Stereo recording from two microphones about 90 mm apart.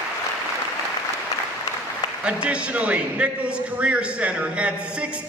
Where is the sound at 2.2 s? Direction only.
10° right (ahead or behind).